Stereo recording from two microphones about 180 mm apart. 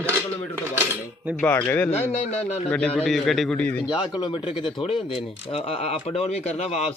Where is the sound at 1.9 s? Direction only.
40° left (ahead or behind).